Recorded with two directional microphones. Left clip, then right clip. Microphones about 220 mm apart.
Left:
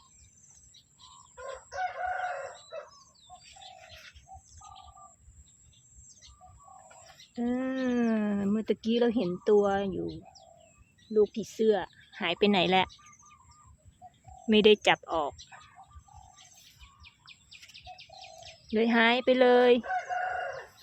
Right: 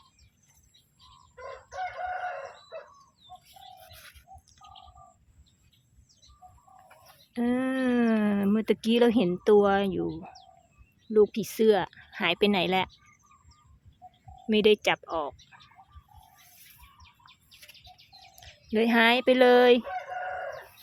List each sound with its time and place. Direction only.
1.7 s chicken: 10° right (ahead or behind)
7.3 s speech: 20° right (ahead or behind)
11.1 s speech: 25° right (ahead or behind); by 12.9 s centre (ahead or behind)
14.4 s speech: 5° left (ahead or behind)
18.3 s speech: 5° right (ahead or behind)
19.9 s crowing: 45° left (ahead or behind)